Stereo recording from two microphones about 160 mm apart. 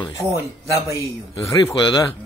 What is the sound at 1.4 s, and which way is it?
Speech, 20° left (ahead or behind).